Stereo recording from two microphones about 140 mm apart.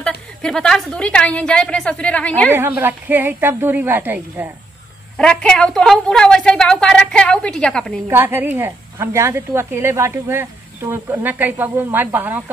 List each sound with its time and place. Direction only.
0.0 s a woman's voice: 5° left (ahead or behind)
2.5 s a woman's voice: 15° right (ahead or behind)
5.1 s a woman's voice: 5° left (ahead or behind)
8.1 s a woman's voice: 15° right (ahead or behind)